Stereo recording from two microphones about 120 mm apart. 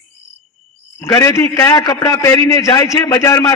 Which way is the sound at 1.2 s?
25° left (ahead or behind).